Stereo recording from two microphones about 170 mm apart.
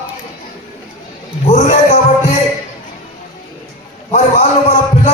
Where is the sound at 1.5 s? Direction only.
45° left (ahead or behind).